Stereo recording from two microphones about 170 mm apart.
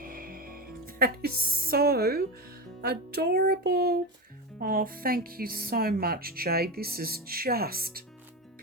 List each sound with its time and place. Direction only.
0.0 s music: 55° right (ahead or behind)
4.6 s speech: 55° right (ahead or behind)